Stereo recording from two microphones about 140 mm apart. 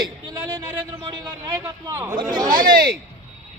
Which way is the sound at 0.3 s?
25° right (ahead or behind).